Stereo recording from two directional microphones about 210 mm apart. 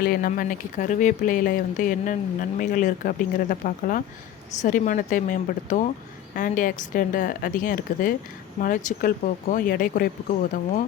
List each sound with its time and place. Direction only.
0.0 s speech: 45° left (ahead or behind)